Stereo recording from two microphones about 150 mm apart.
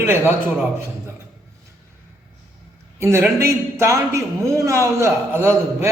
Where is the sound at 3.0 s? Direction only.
20° right (ahead or behind).